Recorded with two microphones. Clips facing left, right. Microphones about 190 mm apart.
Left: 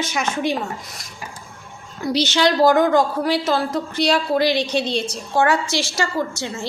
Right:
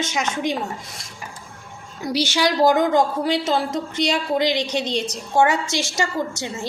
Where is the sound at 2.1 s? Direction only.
10° right (ahead or behind).